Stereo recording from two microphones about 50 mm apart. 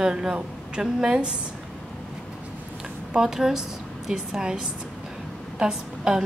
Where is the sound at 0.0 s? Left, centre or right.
Centre.